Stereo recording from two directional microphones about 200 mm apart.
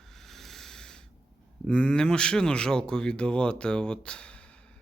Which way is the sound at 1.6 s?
5° left (ahead or behind).